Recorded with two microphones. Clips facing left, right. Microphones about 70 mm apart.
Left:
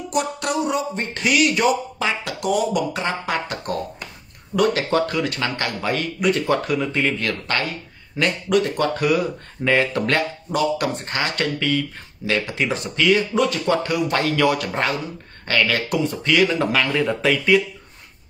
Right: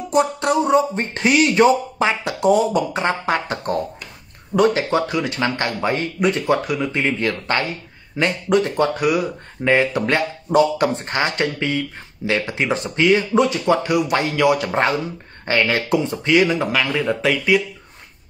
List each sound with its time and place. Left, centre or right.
0.1 s speech: right
6.5 s speech: centre
6.9 s speech: centre
8.9 s speech: centre
16.5 s speech: centre